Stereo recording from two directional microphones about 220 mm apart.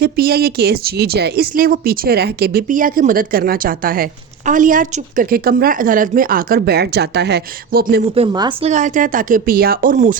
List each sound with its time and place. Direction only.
0.0 s a woman's voice: 45° right (ahead or behind)
8.1 s a woman's voice: 20° right (ahead or behind)
8.7 s speech: 35° right (ahead or behind)